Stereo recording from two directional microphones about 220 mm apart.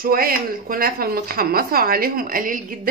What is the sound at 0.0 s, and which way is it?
Speech, 40° right (ahead or behind).